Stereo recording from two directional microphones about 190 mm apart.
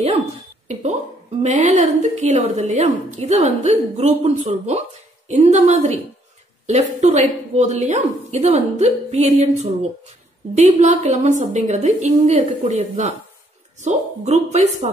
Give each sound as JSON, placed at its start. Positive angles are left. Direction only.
{"t": 1.4, "sound": "a woman's voice", "side_deg": -35}